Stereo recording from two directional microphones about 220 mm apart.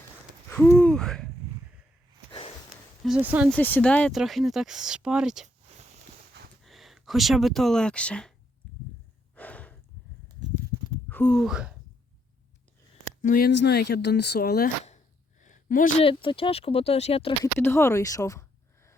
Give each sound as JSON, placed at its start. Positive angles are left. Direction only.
{"t": 0.5, "sound": "hoot", "side_deg": 10}
{"t": 3.0, "sound": "speech", "side_deg": -5}
{"t": 3.5, "sound": "speech", "side_deg": 5}
{"t": 5.6, "sound": "a sound", "side_deg": -30}
{"t": 6.6, "sound": "speech", "side_deg": 0}
{"t": 9.3, "sound": "snort", "side_deg": 5}
{"t": 11.1, "sound": "speech", "side_deg": 5}
{"t": 13.2, "sound": "speech", "side_deg": 40}
{"t": 14.8, "sound": "a sound", "side_deg": 35}
{"t": 16.0, "sound": "speech", "side_deg": 25}
{"t": 17.4, "sound": "speech", "side_deg": 10}